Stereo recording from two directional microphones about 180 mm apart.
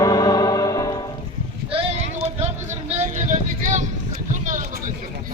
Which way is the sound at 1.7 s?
30° right (ahead or behind).